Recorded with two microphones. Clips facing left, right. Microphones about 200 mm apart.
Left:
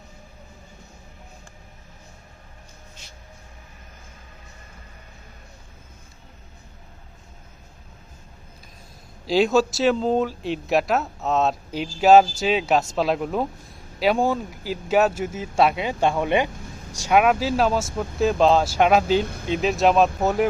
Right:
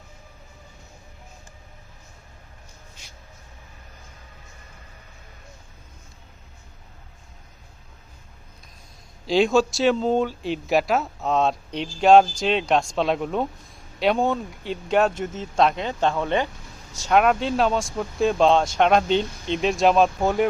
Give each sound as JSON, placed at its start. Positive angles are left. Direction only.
{"t": 9.2, "sound": "speech", "side_deg": 0}
{"t": 19.2, "sound": "speech", "side_deg": 55}
{"t": 19.5, "sound": "speech", "side_deg": 0}